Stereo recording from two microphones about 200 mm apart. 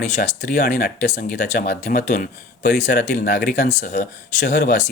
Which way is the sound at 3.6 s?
40° left (ahead or behind).